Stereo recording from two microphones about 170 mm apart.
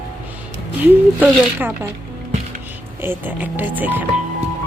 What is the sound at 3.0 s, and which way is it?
A woman's voice, 10° right (ahead or behind).